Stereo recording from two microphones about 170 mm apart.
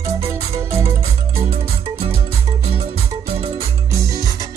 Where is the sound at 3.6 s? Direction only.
20° right (ahead or behind).